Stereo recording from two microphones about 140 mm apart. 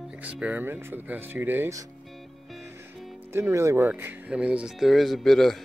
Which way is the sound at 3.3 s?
20° right (ahead or behind).